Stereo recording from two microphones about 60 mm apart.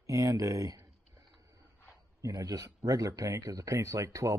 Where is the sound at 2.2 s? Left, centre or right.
Right.